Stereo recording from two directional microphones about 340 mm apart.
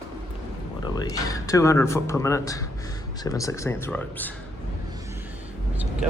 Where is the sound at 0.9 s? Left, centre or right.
Centre.